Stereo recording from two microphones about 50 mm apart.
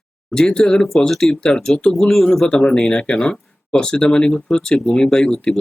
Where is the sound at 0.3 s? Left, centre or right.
Centre.